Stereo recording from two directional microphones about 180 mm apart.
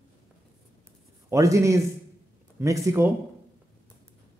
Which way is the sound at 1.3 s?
15° right (ahead or behind).